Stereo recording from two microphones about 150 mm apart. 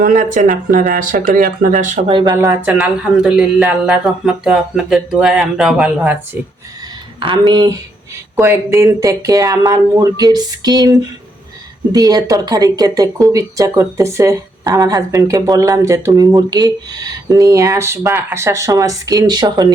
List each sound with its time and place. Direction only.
0.0 s speech: 60° right (ahead or behind)
2.0 s speech: 30° right (ahead or behind)
2.3 s speech: 20° right (ahead or behind)
2.7 s speech: 5° right (ahead or behind)
7.2 s speech: 30° right (ahead or behind)
8.4 s speech: 15° right (ahead or behind)